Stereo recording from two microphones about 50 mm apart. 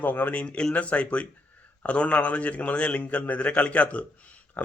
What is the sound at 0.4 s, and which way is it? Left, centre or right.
Speech, centre.